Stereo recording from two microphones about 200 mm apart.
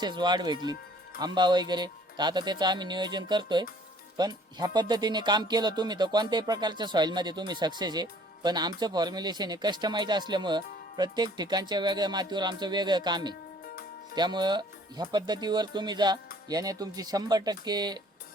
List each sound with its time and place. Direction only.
0.0 s speech: 20° right (ahead or behind)